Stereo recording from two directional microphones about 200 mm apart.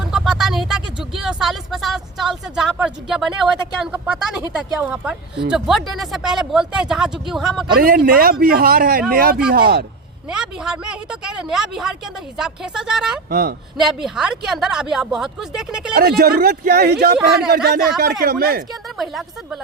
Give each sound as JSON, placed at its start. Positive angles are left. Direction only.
{"t": 0.1, "sound": "speech", "side_deg": 0}
{"t": 7.8, "sound": "speech", "side_deg": -45}
{"t": 10.2, "sound": "speech", "side_deg": -5}
{"t": 13.3, "sound": "speech", "side_deg": -50}
{"t": 13.7, "sound": "speech", "side_deg": 0}
{"t": 16.0, "sound": "speech", "side_deg": -50}
{"t": 18.9, "sound": "speech", "side_deg": 0}